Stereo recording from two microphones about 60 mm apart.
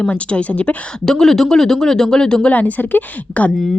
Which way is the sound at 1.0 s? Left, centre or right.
Centre.